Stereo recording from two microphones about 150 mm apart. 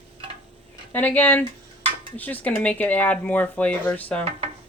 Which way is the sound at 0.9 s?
10° left (ahead or behind).